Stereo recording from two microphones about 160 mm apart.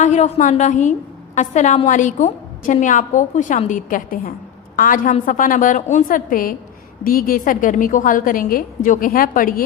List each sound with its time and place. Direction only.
0.0 s a woman's voice: 50° left (ahead or behind)